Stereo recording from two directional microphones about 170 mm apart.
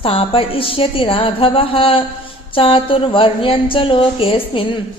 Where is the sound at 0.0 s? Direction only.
35° left (ahead or behind).